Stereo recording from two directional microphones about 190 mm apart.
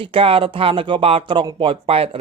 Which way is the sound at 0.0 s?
30° right (ahead or behind).